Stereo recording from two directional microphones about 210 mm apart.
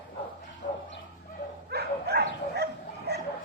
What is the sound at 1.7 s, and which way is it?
Dog, 50° right (ahead or behind).